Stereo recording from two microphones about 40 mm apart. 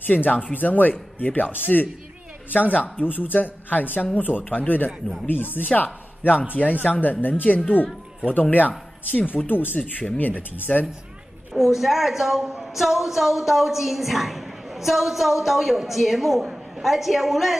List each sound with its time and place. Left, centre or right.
0.0 s speech: left
5.2 s speech: left
7.4 s speech: left
8.4 s speech: left
9.5 s speech: left
11.5 s a woman's voice: centre